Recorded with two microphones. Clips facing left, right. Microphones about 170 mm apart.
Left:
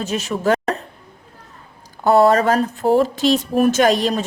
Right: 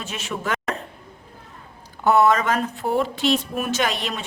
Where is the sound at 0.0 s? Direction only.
40° left (ahead or behind).